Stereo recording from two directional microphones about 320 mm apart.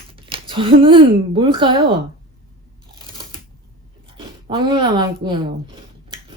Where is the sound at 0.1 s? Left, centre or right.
Centre.